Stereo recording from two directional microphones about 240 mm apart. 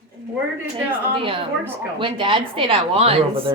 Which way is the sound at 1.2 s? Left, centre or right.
Right.